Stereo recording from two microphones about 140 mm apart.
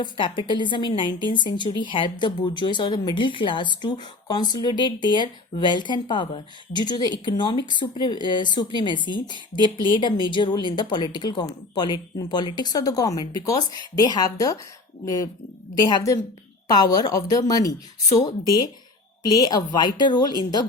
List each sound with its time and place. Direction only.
0.0 s a woman's voice: 35° left (ahead or behind)
16.6 s a woman's voice: 30° left (ahead or behind)
19.3 s a woman's voice: 25° left (ahead or behind)